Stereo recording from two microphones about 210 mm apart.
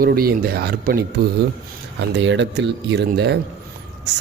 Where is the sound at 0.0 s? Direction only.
45° right (ahead or behind).